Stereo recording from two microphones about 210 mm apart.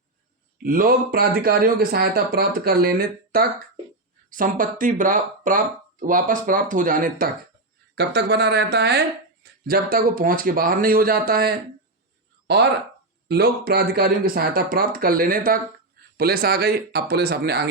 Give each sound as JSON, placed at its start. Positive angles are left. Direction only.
{"t": 0.6, "sound": "speech", "side_deg": -45}
{"t": 7.9, "sound": "speech", "side_deg": -50}